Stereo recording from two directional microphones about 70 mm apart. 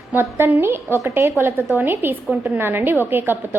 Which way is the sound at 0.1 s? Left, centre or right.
Right.